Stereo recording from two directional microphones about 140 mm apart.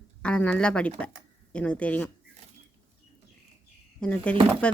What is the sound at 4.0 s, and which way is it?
Speech, 10° left (ahead or behind).